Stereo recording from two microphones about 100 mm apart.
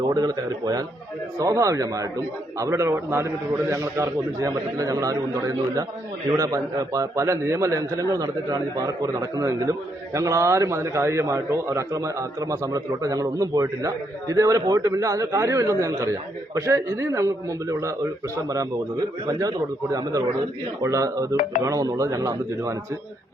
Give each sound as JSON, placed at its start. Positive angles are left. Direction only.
{"t": 0.1, "sound": "a man's voice", "side_deg": -40}